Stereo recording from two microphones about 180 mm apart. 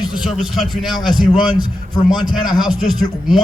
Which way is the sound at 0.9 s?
25° left (ahead or behind).